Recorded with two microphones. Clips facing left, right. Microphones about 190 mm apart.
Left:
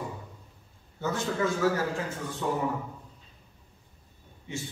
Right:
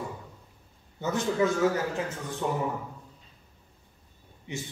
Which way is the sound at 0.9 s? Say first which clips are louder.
Right 3 dB; 20° right (ahead or behind).